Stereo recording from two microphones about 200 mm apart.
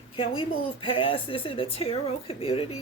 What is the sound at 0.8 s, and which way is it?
Speech, 25° left (ahead or behind).